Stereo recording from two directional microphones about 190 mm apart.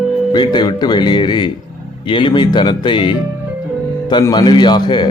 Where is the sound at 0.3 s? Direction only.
25° left (ahead or behind).